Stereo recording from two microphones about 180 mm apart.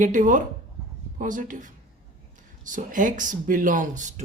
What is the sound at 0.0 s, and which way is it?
Speech, 45° right (ahead or behind).